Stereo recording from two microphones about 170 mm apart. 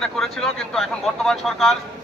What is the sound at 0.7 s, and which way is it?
Speech, centre (ahead or behind).